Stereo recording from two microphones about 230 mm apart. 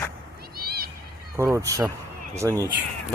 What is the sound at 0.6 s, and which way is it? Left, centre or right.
Neigh, right.